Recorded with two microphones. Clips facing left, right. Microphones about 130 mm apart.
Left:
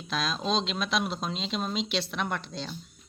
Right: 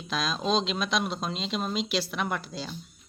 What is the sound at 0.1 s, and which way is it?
Speech, centre (ahead or behind).